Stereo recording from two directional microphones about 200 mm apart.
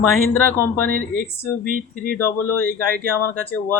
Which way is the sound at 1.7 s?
45° right (ahead or behind).